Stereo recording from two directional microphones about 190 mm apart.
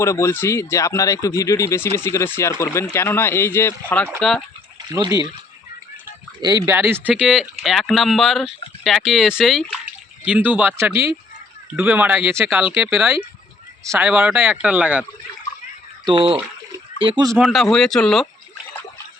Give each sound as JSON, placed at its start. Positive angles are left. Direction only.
{"t": 0.0, "sound": "speech", "side_deg": 15}
{"t": 4.9, "sound": "speech", "side_deg": -20}
{"t": 6.4, "sound": "speech", "side_deg": -15}
{"t": 16.0, "sound": "speech", "side_deg": -30}
{"t": 17.3, "sound": "speech", "side_deg": 0}